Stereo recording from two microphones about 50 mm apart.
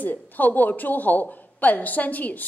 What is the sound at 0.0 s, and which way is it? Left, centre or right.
A woman's voice, left.